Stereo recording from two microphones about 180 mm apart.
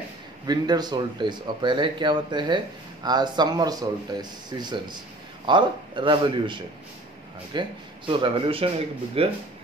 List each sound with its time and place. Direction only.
0.5 s speech: 20° right (ahead or behind)